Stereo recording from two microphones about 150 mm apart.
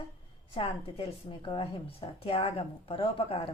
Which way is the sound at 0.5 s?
40° left (ahead or behind).